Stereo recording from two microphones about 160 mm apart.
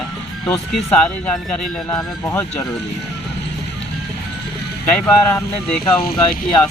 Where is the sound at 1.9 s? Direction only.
20° left (ahead or behind).